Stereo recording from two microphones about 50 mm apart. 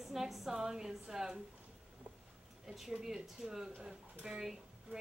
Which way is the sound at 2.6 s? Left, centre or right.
Centre.